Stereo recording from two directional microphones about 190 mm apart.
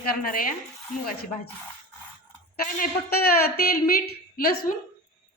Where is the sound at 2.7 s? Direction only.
55° left (ahead or behind).